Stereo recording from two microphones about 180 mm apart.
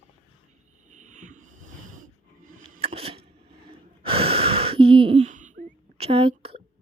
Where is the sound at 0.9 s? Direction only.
40° right (ahead or behind).